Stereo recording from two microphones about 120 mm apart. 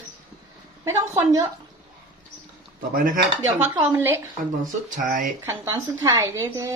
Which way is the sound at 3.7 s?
15° right (ahead or behind).